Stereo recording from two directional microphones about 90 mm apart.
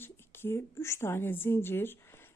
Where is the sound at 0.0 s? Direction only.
25° left (ahead or behind).